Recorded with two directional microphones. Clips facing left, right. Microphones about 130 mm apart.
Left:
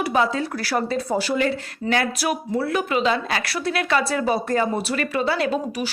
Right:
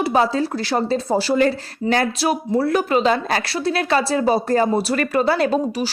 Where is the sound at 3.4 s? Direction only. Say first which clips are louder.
Right 2 dB; 30° right (ahead or behind).